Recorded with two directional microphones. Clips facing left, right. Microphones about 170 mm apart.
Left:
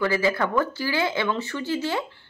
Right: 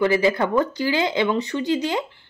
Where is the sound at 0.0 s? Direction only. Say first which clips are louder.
Right 4 dB; 20° right (ahead or behind).